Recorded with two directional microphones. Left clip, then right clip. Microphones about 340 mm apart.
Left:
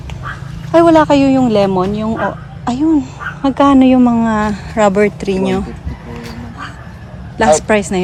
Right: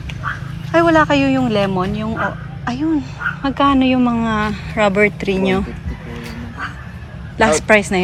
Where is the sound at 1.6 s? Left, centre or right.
Centre.